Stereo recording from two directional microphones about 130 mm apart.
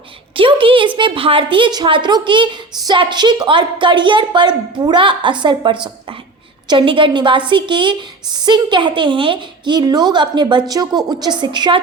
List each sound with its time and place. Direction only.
0.3 s a woman's voice: 40° right (ahead or behind)